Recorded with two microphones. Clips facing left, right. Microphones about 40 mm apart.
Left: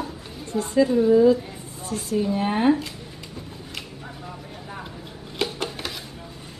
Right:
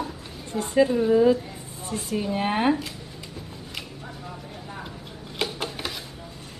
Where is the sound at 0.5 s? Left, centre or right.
Centre.